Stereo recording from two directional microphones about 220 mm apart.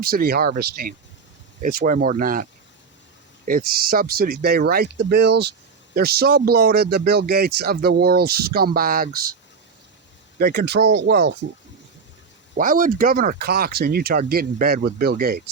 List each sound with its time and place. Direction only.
0.0 s speech: 45° right (ahead or behind)
10.3 s speech: 45° right (ahead or behind)
12.5 s speech: 40° right (ahead or behind)